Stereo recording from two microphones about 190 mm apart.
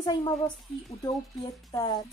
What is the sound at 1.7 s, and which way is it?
Speech, 20° left (ahead or behind).